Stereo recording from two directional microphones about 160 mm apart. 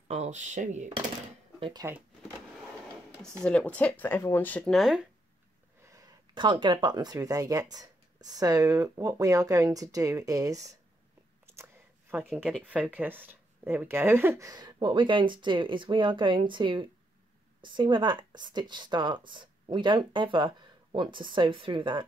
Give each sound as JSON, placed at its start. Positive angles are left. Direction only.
{"t": 0.1, "sound": "speech", "side_deg": -45}
{"t": 1.6, "sound": "speech", "side_deg": -25}
{"t": 3.2, "sound": "speech", "side_deg": 5}
{"t": 5.9, "sound": "speech", "side_deg": -20}
{"t": 12.1, "sound": "speech", "side_deg": -10}